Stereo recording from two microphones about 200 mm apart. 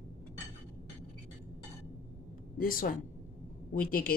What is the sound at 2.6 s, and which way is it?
Speech, 45° left (ahead or behind).